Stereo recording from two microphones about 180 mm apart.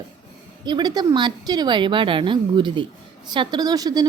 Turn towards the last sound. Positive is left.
turn(degrees=-20)  # may be behind; listen again after turning